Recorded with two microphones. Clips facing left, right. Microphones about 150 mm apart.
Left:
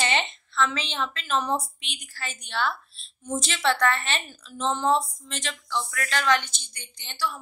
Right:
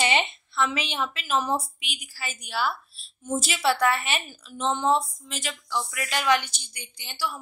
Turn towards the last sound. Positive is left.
turn(degrees=-10)  # may be behind; listen again after turning